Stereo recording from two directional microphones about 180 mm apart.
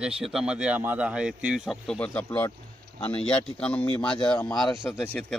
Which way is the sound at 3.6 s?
5° left (ahead or behind).